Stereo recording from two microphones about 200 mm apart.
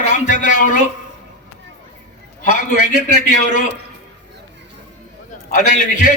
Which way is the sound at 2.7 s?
55° right (ahead or behind).